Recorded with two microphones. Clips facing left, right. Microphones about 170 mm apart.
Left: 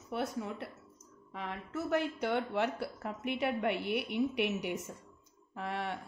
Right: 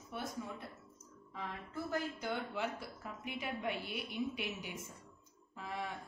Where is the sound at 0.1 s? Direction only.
70° left (ahead or behind).